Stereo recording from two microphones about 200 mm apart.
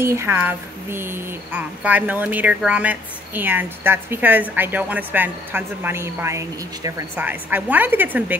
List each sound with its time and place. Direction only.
0.0 s speech: 10° right (ahead or behind)